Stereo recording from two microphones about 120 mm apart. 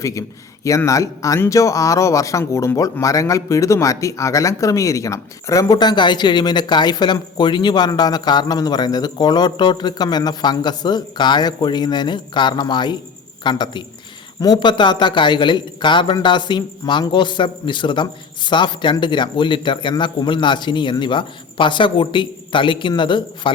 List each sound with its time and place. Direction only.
0.0 s a man's voice: 25° left (ahead or behind)